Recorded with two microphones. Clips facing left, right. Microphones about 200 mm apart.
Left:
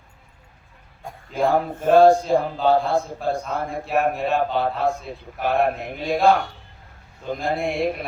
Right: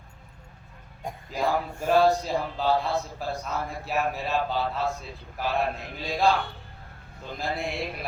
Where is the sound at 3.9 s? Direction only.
55° left (ahead or behind).